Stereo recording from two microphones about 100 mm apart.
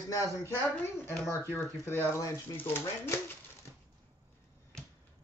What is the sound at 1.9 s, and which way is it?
Speech, 25° left (ahead or behind).